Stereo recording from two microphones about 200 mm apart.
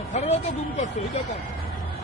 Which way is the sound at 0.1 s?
35° left (ahead or behind).